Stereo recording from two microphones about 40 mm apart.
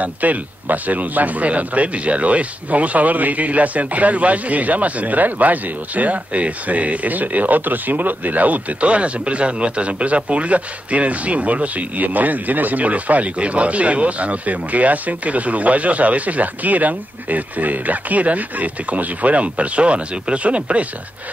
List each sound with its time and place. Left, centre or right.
0.0 s speech: right